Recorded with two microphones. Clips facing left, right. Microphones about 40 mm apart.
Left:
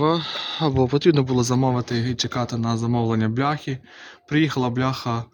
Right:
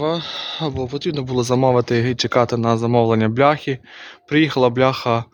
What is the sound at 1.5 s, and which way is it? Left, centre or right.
Speech, right.